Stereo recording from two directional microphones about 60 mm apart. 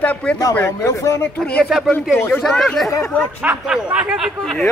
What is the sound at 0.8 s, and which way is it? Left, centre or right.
Speech, left.